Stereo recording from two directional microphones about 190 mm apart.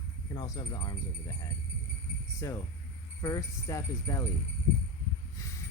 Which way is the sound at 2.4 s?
15° left (ahead or behind).